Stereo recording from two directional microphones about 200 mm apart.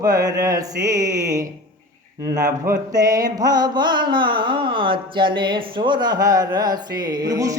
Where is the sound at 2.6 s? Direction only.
15° right (ahead or behind).